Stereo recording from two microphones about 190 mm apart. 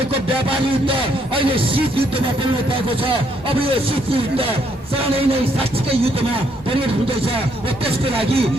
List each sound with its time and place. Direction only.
1.4 s speech: 30° right (ahead or behind)
3.6 s speech: 30° right (ahead or behind)
7.9 s speech: 30° right (ahead or behind)